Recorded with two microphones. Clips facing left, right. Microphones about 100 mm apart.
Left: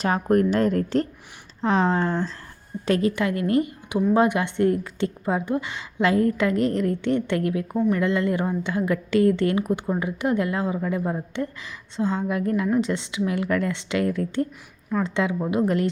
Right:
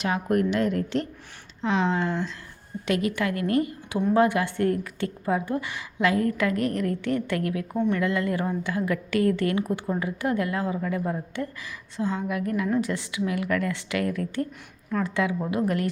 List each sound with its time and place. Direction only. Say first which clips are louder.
0.0 s speech: left 4 dB; 40° left (ahead or behind)
3.2 s a woman's voice: left 2 dB; 25° left (ahead or behind)